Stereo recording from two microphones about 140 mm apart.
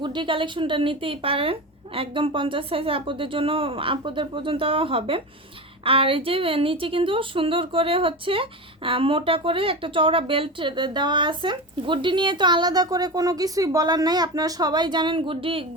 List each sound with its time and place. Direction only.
0.0 s a woman's voice: 35° right (ahead or behind)